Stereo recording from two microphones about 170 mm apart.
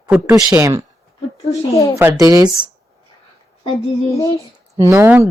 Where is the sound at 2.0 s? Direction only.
15° right (ahead or behind).